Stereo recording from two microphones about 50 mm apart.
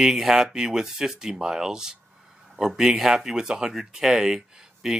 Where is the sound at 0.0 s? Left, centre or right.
Centre.